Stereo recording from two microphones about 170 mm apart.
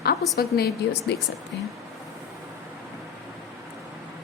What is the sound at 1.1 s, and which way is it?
Speech, 75° left (ahead or behind).